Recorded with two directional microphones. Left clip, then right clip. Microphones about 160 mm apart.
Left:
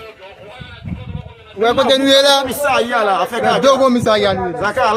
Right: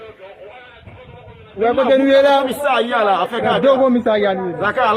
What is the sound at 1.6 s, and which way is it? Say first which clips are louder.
Speech: left 1 dB; 25° left (ahead or behind).